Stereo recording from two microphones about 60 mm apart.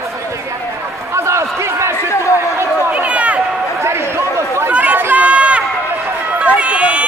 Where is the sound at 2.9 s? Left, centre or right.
Right.